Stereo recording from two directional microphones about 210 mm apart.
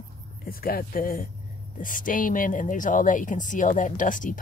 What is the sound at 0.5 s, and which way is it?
Speech, 45° left (ahead or behind).